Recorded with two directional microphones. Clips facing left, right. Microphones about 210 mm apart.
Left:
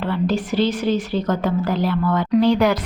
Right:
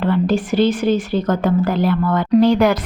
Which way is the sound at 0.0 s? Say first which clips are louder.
Right 4 dB; 50° right (ahead or behind).